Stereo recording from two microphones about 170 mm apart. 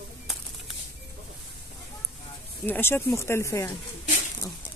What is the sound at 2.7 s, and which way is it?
Speech, 15° left (ahead or behind).